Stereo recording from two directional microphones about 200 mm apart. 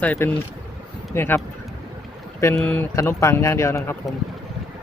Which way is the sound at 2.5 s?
5° left (ahead or behind).